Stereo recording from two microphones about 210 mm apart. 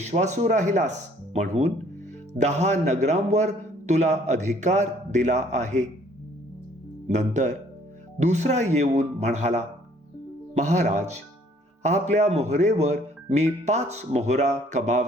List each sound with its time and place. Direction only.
0.0 s a man's voice: 35° right (ahead or behind)
7.1 s a man's voice: 35° right (ahead or behind)